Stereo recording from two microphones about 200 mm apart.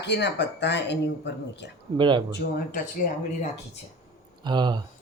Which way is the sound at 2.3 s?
50° left (ahead or behind).